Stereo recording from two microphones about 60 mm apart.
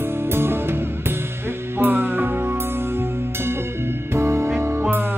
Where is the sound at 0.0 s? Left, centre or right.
Right.